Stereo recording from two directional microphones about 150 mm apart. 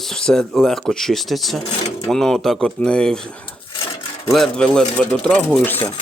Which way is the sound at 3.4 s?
35° left (ahead or behind).